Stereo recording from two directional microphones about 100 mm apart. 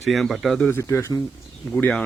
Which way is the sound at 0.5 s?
15° left (ahead or behind).